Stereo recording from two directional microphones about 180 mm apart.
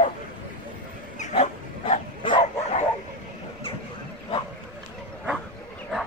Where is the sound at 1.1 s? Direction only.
40° left (ahead or behind).